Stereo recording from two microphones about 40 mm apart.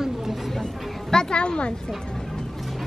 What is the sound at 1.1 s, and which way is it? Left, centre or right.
Speech, left.